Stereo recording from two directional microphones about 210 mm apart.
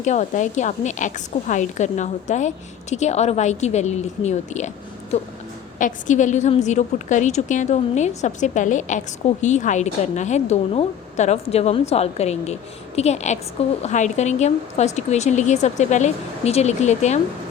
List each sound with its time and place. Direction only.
0.0 s a woman's voice: 35° left (ahead or behind)
5.8 s a woman's voice: 35° left (ahead or behind)